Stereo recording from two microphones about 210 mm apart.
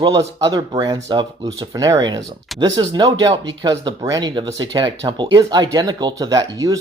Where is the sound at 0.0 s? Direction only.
20° right (ahead or behind).